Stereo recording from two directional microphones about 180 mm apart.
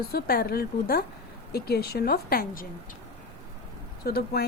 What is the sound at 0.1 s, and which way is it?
Speech, 60° left (ahead or behind).